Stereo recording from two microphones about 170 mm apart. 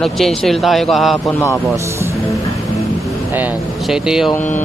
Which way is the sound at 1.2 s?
20° left (ahead or behind).